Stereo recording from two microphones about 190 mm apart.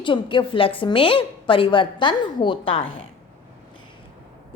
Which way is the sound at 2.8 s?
90° left.